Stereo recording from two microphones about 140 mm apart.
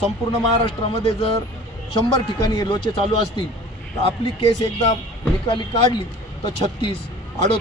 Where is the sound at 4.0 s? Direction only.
40° left (ahead or behind).